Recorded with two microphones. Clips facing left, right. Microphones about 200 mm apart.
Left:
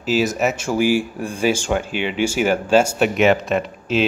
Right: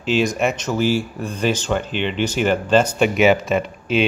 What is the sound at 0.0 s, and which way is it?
Speech, 5° left (ahead or behind).